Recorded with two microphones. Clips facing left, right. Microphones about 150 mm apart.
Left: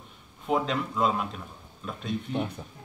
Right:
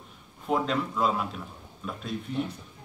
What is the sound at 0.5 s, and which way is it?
Speech, centre (ahead or behind).